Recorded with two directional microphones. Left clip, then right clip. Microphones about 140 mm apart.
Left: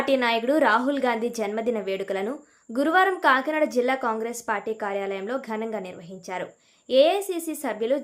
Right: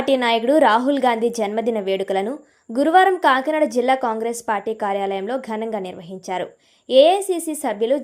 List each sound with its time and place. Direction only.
0.0 s a woman's voice: 35° right (ahead or behind)